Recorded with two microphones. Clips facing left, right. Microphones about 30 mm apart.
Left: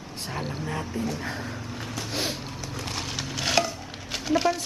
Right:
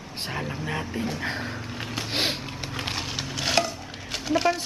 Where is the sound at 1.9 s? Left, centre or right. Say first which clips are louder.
Right 4 dB; right.